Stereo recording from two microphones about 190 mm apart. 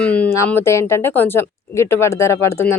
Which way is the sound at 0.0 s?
5° left (ahead or behind).